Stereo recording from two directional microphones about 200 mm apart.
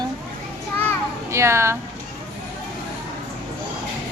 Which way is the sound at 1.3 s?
15° right (ahead or behind).